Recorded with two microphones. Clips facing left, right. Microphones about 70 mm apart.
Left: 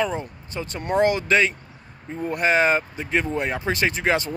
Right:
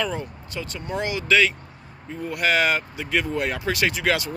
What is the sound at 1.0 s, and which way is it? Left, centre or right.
Speech, left.